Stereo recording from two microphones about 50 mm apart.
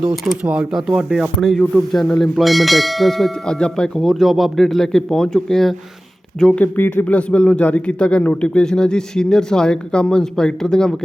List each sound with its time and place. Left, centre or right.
0.4 s speech: right
1.4 s a man's voice: centre
3.4 s a man's voice: centre
4.0 s speech: centre
6.9 s a man's voice: left